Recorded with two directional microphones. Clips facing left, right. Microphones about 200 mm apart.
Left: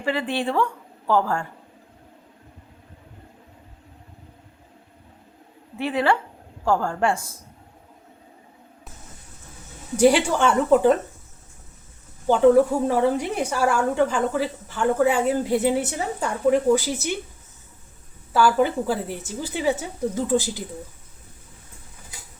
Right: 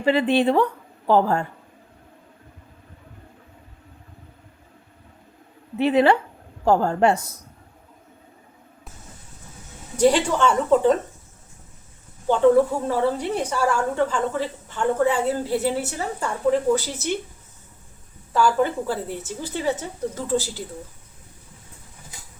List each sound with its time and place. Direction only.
0.0 s a woman's voice: 20° right (ahead or behind)
5.7 s a woman's voice: 20° right (ahead or behind)
10.0 s a woman's voice: 10° left (ahead or behind)
12.9 s a woman's voice: 10° left (ahead or behind)
18.3 s a woman's voice: 10° left (ahead or behind)